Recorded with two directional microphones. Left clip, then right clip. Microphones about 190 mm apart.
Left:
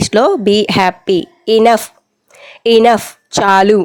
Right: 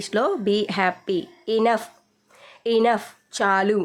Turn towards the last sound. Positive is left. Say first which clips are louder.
# left 11 dB
turn(degrees=40)  # may be behind; listen again after turning